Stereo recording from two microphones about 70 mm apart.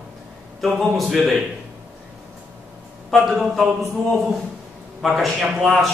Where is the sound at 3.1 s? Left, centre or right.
Centre.